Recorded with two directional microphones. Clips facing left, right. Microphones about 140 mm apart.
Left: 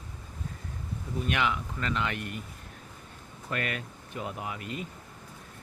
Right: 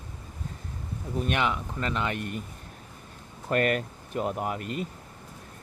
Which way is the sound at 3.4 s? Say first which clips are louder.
Right 9 dB; 50° right (ahead or behind).